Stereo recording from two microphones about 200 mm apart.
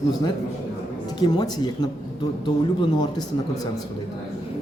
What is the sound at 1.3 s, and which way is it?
Speech, 20° left (ahead or behind).